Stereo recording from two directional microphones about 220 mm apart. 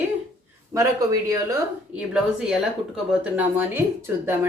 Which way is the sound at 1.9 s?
5° right (ahead or behind).